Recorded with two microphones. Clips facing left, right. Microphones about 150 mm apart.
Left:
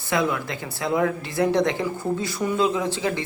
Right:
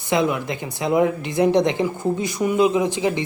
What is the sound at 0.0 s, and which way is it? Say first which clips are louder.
Speech: right 3 dB; 20° right (ahead or behind).